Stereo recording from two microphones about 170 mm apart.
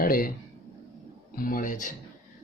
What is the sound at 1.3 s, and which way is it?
Speech, 60° left (ahead or behind).